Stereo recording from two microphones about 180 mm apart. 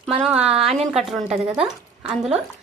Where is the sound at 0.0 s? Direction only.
Centre (ahead or behind).